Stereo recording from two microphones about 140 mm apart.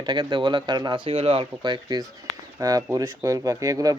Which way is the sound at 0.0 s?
30° right (ahead or behind).